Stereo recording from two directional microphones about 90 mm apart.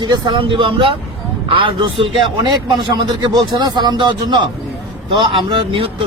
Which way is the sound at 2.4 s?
50° right (ahead or behind).